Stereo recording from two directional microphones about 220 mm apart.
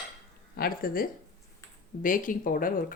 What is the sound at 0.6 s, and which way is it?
Speech, 40° left (ahead or behind).